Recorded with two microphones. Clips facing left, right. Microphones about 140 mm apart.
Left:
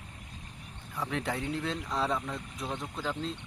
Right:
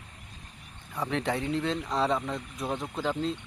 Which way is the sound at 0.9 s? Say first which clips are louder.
Right 4 dB; centre (ahead or behind).